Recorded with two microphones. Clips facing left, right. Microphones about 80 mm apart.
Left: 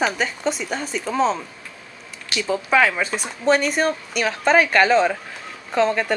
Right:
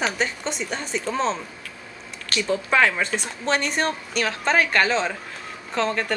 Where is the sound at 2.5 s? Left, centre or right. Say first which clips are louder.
Left 2 dB; centre.